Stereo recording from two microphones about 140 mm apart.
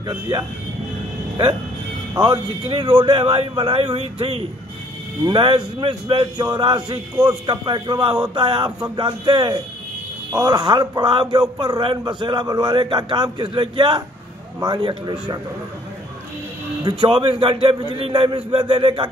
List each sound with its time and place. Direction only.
0.0 s a man's voice: 30° right (ahead or behind)
2.1 s speech: 25° right (ahead or behind)
2.7 s a man's voice: 40° right (ahead or behind)
16.8 s a man's voice: 35° right (ahead or behind)